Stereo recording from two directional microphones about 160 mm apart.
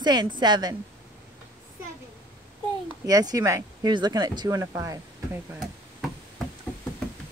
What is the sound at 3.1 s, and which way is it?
Speech, 20° right (ahead or behind).